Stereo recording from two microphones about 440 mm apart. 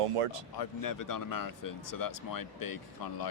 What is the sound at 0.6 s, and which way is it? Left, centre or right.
Speech, left.